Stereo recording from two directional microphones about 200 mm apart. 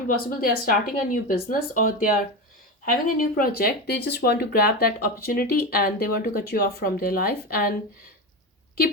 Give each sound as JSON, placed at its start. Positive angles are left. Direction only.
{"t": 0.1, "sound": "speech", "side_deg": 45}